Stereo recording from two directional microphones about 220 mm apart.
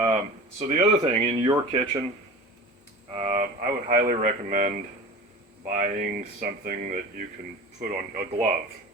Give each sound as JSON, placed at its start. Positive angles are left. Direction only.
{"t": 0.6, "sound": "speech", "side_deg": -30}
{"t": 3.1, "sound": "speech", "side_deg": -30}